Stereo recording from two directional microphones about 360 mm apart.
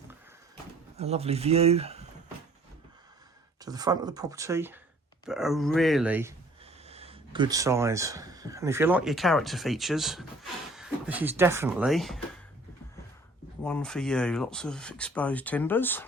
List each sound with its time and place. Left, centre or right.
0.9 s speech: centre
3.6 s speech: centre
6.8 s speech: centre
13.7 s speech: centre